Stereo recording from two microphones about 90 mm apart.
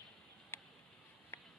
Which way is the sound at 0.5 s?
25° left (ahead or behind).